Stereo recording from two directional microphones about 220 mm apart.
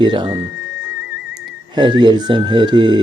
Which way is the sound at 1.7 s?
20° right (ahead or behind).